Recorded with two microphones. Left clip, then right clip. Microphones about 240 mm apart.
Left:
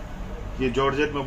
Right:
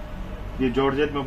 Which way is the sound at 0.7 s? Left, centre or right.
Centre.